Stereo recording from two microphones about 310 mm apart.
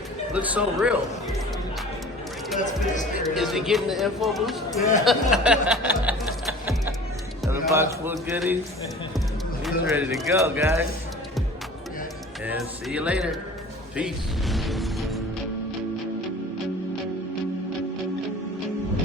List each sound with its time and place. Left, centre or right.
0.3 s speech: centre
2.6 s speech: left
3.2 s speech: centre
7.4 s speech: centre
9.8 s speech: centre
12.5 s speech: centre
14.5 s music: centre